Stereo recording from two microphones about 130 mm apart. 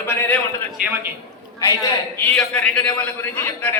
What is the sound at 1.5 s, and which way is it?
Speech, 25° left (ahead or behind).